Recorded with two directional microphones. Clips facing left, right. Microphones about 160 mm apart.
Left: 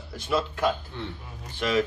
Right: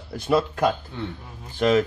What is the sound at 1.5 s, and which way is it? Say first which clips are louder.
Speech: right 6 dB; 45° right (ahead or behind).